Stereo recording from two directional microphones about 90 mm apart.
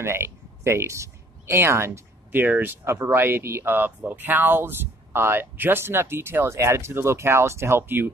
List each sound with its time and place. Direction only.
0.0 s speech: 30° right (ahead or behind)